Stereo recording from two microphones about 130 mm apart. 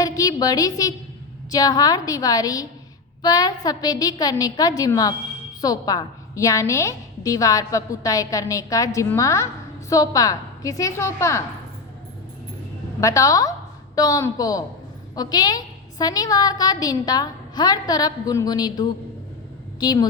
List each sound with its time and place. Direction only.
0.0 s a sound: 30° left (ahead or behind)
1.5 s a woman's voice: 30° left (ahead or behind)
13.0 s a woman's voice: 25° left (ahead or behind)